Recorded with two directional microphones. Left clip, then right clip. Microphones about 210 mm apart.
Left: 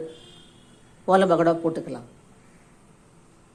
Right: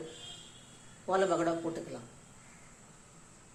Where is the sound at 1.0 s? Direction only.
50° left (ahead or behind).